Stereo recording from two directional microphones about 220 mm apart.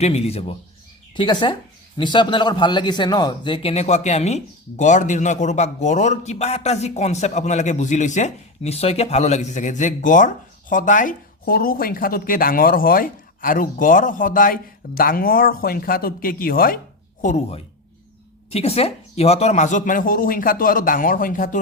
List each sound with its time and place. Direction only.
0.0 s a man's voice: 30° left (ahead or behind)